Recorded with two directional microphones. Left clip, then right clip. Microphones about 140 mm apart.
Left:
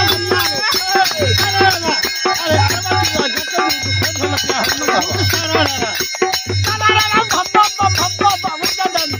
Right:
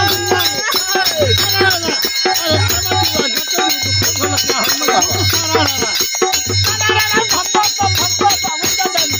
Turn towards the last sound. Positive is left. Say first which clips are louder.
# left 2 dB
turn(degrees=5)  # may be behind; listen again after turning